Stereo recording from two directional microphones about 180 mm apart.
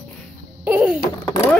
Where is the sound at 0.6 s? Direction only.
5° right (ahead or behind).